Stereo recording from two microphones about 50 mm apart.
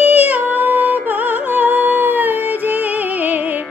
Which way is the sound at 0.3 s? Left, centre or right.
Right.